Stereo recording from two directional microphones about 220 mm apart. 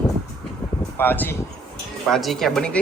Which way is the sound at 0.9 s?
10° left (ahead or behind).